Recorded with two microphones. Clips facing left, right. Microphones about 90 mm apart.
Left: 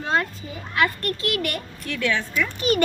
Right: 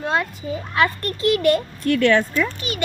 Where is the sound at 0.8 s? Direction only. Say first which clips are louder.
Right 2 dB; 25° right (ahead or behind).